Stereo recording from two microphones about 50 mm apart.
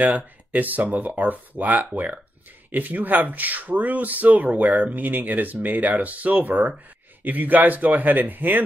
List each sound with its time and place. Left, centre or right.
0.0 s speech: right